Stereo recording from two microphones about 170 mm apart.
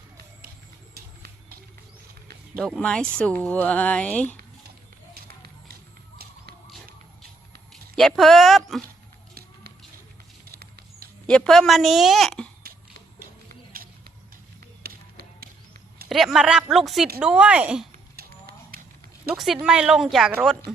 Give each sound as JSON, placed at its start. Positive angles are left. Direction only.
{"t": 0.9, "sound": "vehicle", "side_deg": -60}
{"t": 2.6, "sound": "speech", "side_deg": 5}
{"t": 5.1, "sound": "run", "side_deg": -65}
{"t": 6.2, "sound": "a sound", "side_deg": -65}
{"t": 7.7, "sound": "speech", "side_deg": 0}
{"t": 10.4, "sound": "patter", "side_deg": -65}
{"t": 11.3, "sound": "a woman's voice", "side_deg": 5}
{"t": 14.8, "sound": "tap", "side_deg": -65}
{"t": 16.0, "sound": "a woman's voice", "side_deg": 0}
{"t": 18.2, "sound": "a sound", "side_deg": -65}
{"t": 19.3, "sound": "a woman's voice", "side_deg": 0}